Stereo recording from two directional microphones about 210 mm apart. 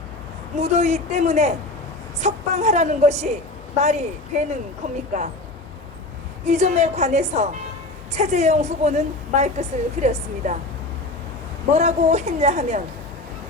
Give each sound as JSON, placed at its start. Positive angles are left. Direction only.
{"t": 0.5, "sound": "a woman's voice", "side_deg": -30}
{"t": 6.4, "sound": "a woman's voice", "side_deg": -35}
{"t": 11.7, "sound": "a woman's voice", "side_deg": -30}